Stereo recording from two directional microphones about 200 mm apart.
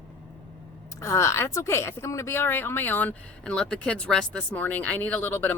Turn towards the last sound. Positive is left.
turn(degrees=10)  # may be behind; listen again after turning